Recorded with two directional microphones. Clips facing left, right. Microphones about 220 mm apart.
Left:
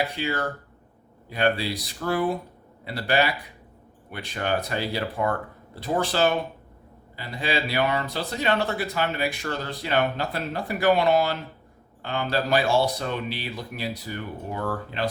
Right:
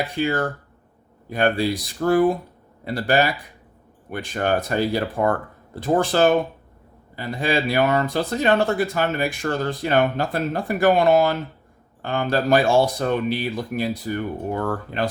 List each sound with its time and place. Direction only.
0.2 s speech: 50° right (ahead or behind)